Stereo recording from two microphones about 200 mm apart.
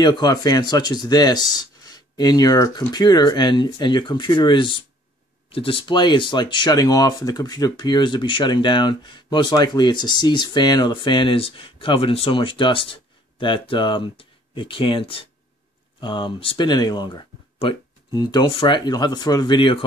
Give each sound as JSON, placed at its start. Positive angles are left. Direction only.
{"t": 0.0, "sound": "speech", "side_deg": 20}